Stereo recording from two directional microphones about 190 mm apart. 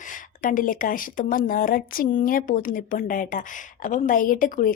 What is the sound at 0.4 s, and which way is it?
A woman's voice, 45° left (ahead or behind).